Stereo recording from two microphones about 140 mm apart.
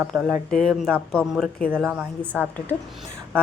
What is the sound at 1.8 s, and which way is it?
Speech, 10° right (ahead or behind).